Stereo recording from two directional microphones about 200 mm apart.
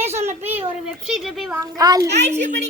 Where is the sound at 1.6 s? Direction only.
20° right (ahead or behind).